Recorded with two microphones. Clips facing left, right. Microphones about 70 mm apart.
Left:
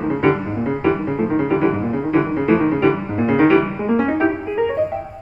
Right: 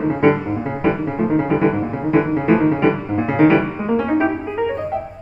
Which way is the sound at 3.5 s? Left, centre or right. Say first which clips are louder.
Left 1 dB; centre.